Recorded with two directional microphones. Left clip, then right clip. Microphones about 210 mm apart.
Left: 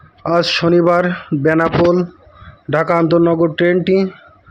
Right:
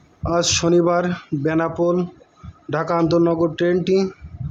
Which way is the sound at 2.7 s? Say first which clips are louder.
Left 5 dB; 15° left (ahead or behind).